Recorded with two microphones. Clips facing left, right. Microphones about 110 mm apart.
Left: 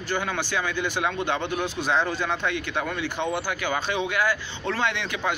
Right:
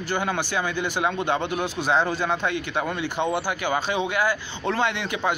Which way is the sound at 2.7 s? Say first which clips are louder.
Right 2 dB; 25° right (ahead or behind).